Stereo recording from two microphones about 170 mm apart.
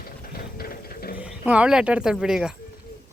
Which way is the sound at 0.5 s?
60° left (ahead or behind).